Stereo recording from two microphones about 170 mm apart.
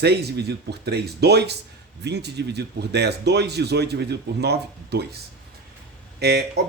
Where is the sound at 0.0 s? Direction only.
75° right (ahead or behind).